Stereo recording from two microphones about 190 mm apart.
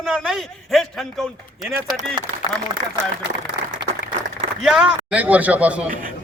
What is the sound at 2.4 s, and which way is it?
Speech, 20° left (ahead or behind).